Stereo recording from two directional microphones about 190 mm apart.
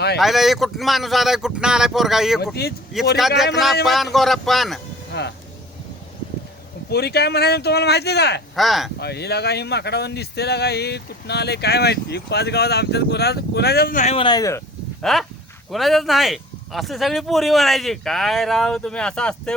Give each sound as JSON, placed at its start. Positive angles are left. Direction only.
{"t": 0.2, "sound": "speech", "side_deg": 0}
{"t": 2.6, "sound": "speech", "side_deg": 55}
{"t": 3.2, "sound": "speech", "side_deg": 0}
{"t": 5.1, "sound": "speech", "side_deg": 60}
{"t": 6.9, "sound": "speech", "side_deg": 60}
{"t": 8.5, "sound": "speech", "side_deg": 0}
{"t": 9.0, "sound": "speech", "side_deg": 60}
{"t": 15.0, "sound": "speech", "side_deg": 0}